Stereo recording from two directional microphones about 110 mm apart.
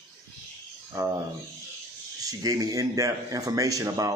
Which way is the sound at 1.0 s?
35° right (ahead or behind).